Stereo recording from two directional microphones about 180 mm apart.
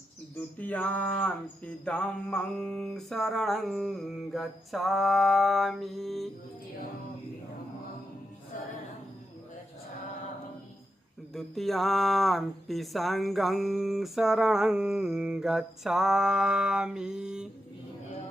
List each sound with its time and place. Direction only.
0.6 s speech: 10° left (ahead or behind)
11.3 s speech: centre (ahead or behind)